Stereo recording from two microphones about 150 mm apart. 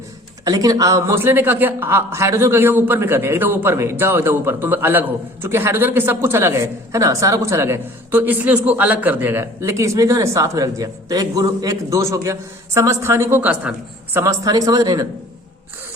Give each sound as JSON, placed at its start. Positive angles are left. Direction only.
{"t": 0.4, "sound": "a man's voice", "side_deg": -25}